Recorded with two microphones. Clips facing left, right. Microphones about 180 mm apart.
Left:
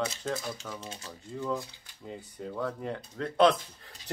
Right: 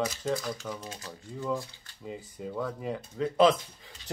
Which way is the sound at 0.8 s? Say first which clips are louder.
Right 1 dB; 25° left (ahead or behind).